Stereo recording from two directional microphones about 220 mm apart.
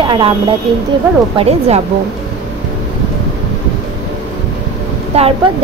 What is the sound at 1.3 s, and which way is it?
Speech, 25° right (ahead or behind).